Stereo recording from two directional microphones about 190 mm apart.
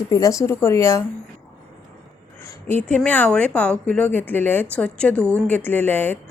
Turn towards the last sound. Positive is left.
turn(degrees=10)  # may be behind; listen again after turning